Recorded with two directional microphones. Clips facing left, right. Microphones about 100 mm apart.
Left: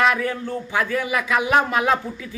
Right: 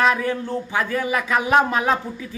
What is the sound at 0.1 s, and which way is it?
Speech, 30° right (ahead or behind).